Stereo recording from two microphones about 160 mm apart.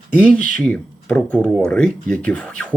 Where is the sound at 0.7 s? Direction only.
5° left (ahead or behind).